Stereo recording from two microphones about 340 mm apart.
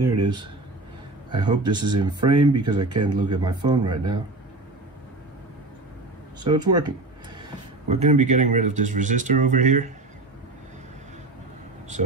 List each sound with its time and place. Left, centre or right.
0.0 s a sound: right
1.3 s speech: centre
6.4 s speech: centre
7.9 s speech: centre